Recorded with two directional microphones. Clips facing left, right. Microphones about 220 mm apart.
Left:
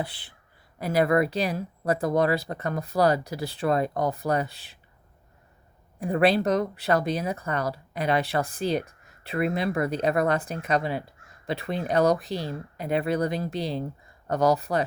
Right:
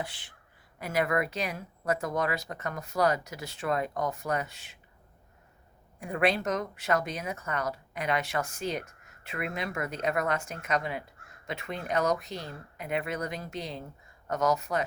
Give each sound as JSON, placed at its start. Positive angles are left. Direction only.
{"t": 0.0, "sound": "speech", "side_deg": 35}
{"t": 6.0, "sound": "speech", "side_deg": 35}